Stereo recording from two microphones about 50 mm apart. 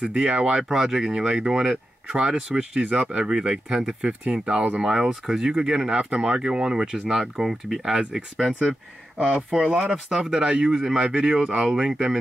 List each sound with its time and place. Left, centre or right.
0.0 s speech: centre
0.7 s speech: centre
7.9 s speech: right
9.2 s speech: right
10.4 s speech: right
10.7 s speech: centre
11.0 s speech: centre